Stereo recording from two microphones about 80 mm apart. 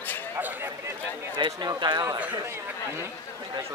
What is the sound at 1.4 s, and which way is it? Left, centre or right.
Speech, right.